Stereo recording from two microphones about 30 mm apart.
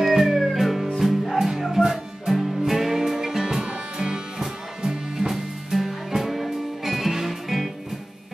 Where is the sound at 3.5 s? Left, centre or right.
Right; by 7.6 s centre.